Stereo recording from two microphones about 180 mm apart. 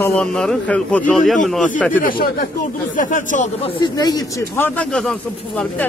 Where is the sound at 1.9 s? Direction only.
50° left (ahead or behind).